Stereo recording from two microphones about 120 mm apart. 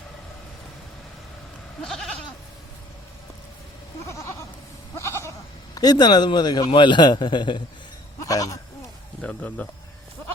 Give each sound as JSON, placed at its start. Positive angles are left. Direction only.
{"t": 1.8, "sound": "goat", "side_deg": 5}
{"t": 4.0, "sound": "goat", "side_deg": 25}
{"t": 5.7, "sound": "speech", "side_deg": 35}
{"t": 8.2, "sound": "speech", "side_deg": 30}
{"t": 9.2, "sound": "speech", "side_deg": 15}